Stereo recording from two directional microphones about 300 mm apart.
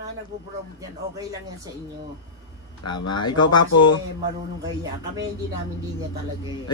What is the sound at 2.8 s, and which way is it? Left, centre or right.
Speech, left.